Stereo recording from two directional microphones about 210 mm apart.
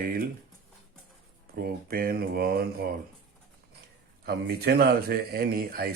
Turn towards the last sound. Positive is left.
turn(degrees=-45)  # may be behind; listen again after turning